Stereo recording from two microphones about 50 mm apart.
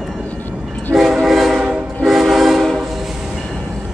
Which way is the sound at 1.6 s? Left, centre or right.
Centre.